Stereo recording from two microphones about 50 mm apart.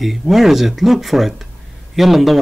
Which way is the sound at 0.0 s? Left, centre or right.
Centre.